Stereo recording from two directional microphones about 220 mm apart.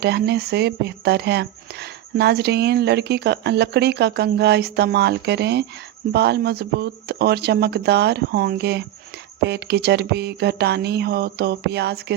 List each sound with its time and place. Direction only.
0.0 s speech: 50° right (ahead or behind)